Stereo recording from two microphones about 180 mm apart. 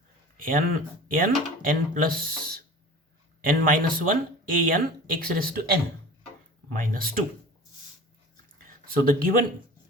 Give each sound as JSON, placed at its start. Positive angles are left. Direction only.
{"t": 0.3, "sound": "speech", "side_deg": -50}
{"t": 6.7, "sound": "speech", "side_deg": -50}
{"t": 8.6, "sound": "speech", "side_deg": -50}